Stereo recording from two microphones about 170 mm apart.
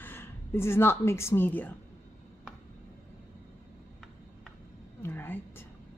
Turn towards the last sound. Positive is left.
turn(degrees=10)  # may be behind; listen again after turning